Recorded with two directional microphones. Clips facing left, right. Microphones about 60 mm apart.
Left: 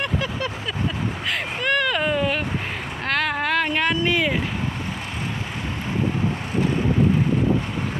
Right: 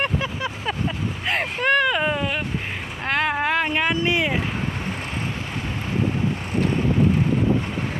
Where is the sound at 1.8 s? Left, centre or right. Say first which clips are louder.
Even; centre.